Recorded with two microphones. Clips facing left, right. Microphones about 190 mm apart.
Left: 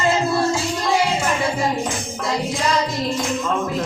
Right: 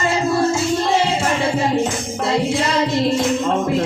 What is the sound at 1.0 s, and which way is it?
Music, 30° right (ahead or behind).